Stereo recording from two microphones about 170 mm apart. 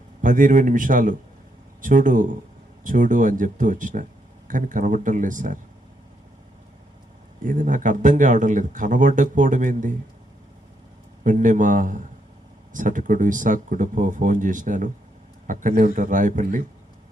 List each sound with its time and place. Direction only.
0.2 s speech: 50° right (ahead or behind)
7.4 s speech: 50° right (ahead or behind)
11.2 s speech: 50° right (ahead or behind)